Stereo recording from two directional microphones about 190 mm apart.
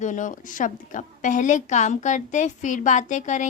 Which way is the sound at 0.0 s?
40° left (ahead or behind).